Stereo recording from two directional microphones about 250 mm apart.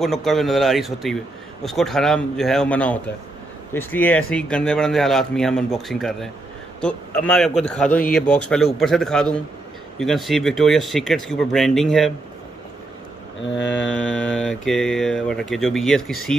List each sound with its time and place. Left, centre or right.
0.0 s a man's voice: centre
13.4 s a sound: left
13.9 s a man's voice: centre